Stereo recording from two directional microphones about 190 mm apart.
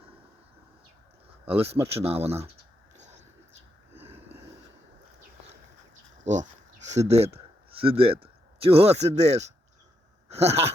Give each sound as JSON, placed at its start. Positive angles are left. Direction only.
{"t": 1.5, "sound": "speech", "side_deg": -30}
{"t": 3.9, "sound": "a sound", "side_deg": -10}
{"t": 6.2, "sound": "speech", "side_deg": -40}